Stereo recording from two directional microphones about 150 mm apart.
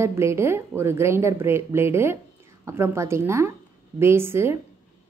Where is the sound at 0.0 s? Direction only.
20° right (ahead or behind).